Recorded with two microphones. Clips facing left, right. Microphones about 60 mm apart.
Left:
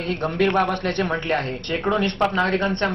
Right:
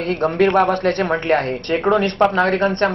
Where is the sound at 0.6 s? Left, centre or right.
Right.